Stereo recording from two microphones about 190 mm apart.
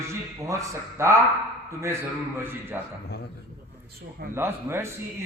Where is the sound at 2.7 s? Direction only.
10° right (ahead or behind).